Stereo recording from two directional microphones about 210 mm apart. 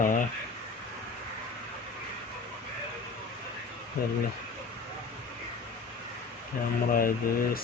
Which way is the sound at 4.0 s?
45° left (ahead or behind).